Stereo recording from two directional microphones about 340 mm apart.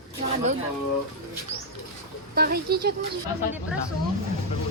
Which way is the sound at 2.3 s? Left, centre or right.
Right.